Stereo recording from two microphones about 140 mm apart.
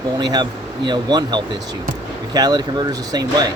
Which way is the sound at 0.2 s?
30° right (ahead or behind).